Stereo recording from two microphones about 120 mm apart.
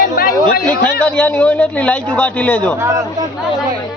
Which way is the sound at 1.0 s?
10° left (ahead or behind).